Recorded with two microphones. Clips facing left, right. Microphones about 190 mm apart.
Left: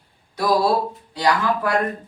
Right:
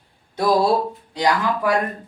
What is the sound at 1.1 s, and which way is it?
Speech, 20° right (ahead or behind).